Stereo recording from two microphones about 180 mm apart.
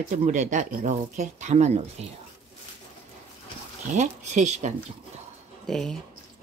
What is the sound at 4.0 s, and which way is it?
Speech, 40° right (ahead or behind).